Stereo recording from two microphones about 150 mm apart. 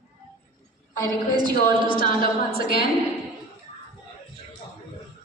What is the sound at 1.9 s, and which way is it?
Speech, 75° left (ahead or behind).